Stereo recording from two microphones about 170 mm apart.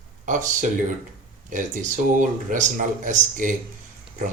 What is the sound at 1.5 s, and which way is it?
Speech, 50° right (ahead or behind).